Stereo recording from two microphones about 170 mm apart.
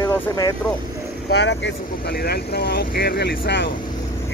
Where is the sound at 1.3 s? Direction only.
85° left.